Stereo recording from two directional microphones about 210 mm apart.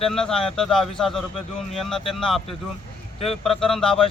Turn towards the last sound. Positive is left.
turn(degrees=5)  # may be behind; listen again after turning